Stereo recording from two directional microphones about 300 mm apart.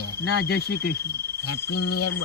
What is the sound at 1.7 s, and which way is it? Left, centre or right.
Speech, left.